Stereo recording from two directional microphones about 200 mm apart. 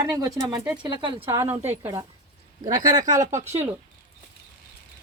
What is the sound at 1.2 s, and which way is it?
Speech, 10° right (ahead or behind).